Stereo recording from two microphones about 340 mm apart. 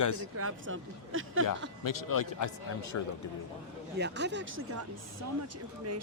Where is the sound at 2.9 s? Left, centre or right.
Left.